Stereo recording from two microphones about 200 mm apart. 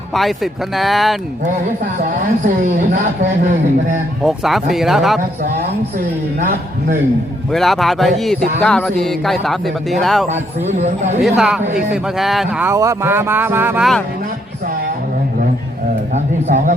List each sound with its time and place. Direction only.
0.1 s speech: centre (ahead or behind)
2.7 s speech: 35° right (ahead or behind)
4.2 s speech: centre (ahead or behind)
7.5 s speech: centre (ahead or behind)
10.2 s speech: 35° right (ahead or behind)
11.3 s speech: centre (ahead or behind)
16.1 s speech: 35° right (ahead or behind)